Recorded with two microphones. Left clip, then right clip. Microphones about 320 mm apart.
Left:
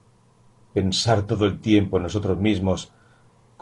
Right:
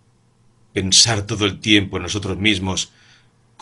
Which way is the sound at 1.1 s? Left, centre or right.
Right.